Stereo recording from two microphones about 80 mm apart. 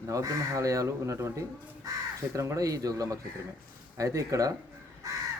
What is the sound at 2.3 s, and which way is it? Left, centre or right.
Speech, right.